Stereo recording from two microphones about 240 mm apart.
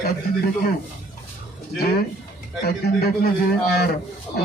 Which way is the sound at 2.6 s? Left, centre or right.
Left.